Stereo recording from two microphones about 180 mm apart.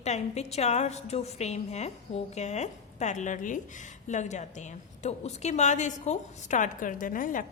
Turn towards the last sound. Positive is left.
turn(degrees=50)  # may be behind; listen again after turning